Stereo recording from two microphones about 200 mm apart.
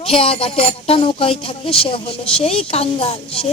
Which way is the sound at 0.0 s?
30° left (ahead or behind).